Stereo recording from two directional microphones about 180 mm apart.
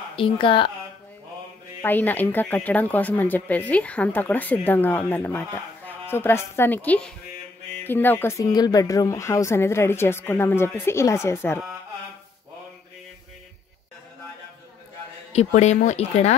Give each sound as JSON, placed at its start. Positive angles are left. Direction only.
{"t": 0.1, "sound": "speech", "side_deg": 30}
{"t": 1.8, "sound": "speech", "side_deg": 10}
{"t": 15.3, "sound": "speech", "side_deg": 40}